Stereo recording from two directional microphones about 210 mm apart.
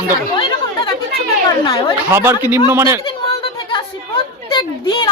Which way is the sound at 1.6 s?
20° left (ahead or behind).